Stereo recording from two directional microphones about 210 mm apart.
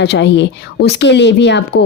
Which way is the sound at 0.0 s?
55° left (ahead or behind).